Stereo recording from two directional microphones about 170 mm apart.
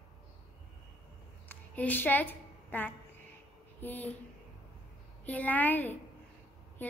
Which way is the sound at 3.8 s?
10° left (ahead or behind).